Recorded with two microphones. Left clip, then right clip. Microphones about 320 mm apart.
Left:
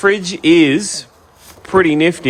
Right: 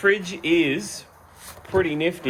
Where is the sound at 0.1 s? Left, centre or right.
Left.